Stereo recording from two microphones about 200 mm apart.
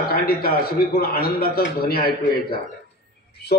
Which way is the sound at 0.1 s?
50° left (ahead or behind).